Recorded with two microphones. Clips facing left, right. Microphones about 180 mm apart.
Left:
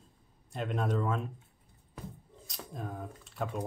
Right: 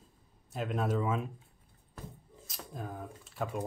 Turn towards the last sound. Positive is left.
turn(degrees=0)  # may be behind; listen again after turning